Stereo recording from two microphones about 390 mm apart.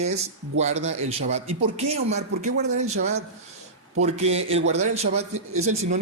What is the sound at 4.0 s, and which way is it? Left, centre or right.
Speech, centre.